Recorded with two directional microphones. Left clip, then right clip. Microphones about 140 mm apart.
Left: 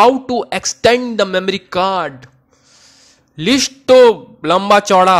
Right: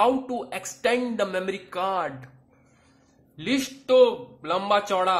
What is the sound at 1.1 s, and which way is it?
Speech, 45° left (ahead or behind).